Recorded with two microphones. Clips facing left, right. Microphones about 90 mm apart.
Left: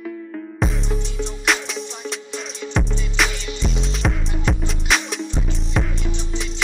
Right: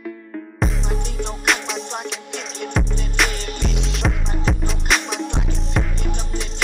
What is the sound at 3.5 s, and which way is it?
Music, 50° right (ahead or behind).